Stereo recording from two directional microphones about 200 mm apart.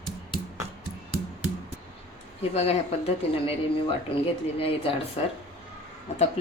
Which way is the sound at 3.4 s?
25° left (ahead or behind).